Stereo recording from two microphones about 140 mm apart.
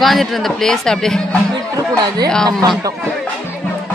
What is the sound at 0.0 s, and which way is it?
Speech, centre (ahead or behind).